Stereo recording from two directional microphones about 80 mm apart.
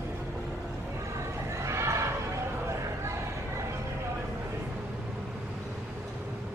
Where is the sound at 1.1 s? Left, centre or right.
Right.